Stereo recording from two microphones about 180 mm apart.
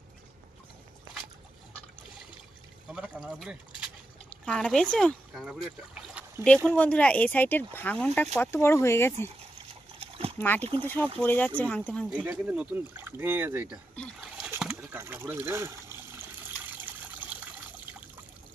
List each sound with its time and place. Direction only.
2.9 s speech: 5° right (ahead or behind)
6.7 s speech: 10° left (ahead or behind)
10.0 s a sound: 30° right (ahead or behind)
10.3 s speech: 10° left (ahead or behind)
12.1 s speech: 10° right (ahead or behind)
14.3 s water: 5° right (ahead or behind)